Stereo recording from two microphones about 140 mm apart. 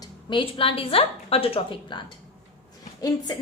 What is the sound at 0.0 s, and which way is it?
A woman's voice, 35° left (ahead or behind).